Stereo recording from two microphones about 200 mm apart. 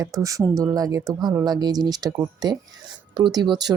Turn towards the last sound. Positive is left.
turn(degrees=-20)  # may be behind; listen again after turning